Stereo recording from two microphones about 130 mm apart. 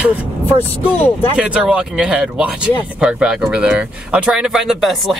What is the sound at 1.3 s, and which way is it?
Speech, 10° right (ahead or behind).